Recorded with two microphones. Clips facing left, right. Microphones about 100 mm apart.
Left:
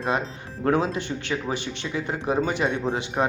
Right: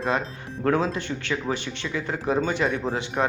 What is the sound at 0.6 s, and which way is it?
Speech, 20° left (ahead or behind).